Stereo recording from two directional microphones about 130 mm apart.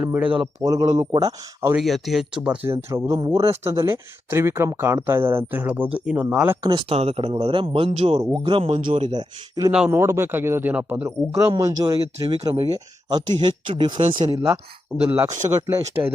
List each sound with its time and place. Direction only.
0.0 s a man's voice: 10° right (ahead or behind)
0.6 s speech: 30° right (ahead or behind)
1.7 s speech: centre (ahead or behind)
2.6 s speech: 20° right (ahead or behind)
6.6 s speech: 35° right (ahead or behind)
6.8 s speech: 50° right (ahead or behind)
7.9 s speech: 55° right (ahead or behind)
8.2 s speech: 35° right (ahead or behind)
9.9 s a man's voice: 20° right (ahead or behind)
11.3 s speech: 25° right (ahead or behind)
15.1 s speech: 20° right (ahead or behind)